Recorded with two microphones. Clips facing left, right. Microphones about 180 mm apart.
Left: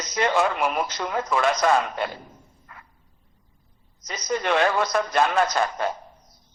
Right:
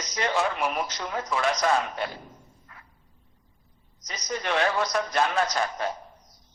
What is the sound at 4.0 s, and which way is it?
A man's voice, 55° left (ahead or behind).